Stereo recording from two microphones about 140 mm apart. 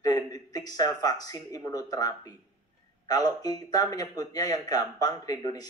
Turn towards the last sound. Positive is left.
turn(degrees=25)  # may be behind; listen again after turning